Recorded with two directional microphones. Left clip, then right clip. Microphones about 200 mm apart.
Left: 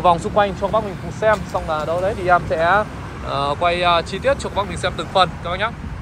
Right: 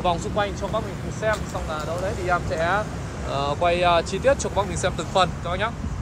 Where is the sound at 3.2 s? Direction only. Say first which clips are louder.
Left 4 dB; 10° right (ahead or behind).